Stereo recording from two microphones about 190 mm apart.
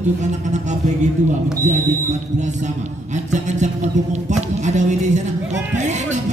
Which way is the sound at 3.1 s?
40° right (ahead or behind).